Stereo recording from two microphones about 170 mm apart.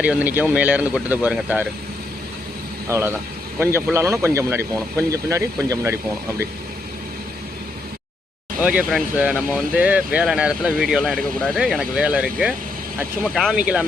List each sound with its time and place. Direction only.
0.0 s speech: 10° right (ahead or behind)
2.9 s speech: 15° right (ahead or behind)
8.6 s speech: 5° right (ahead or behind)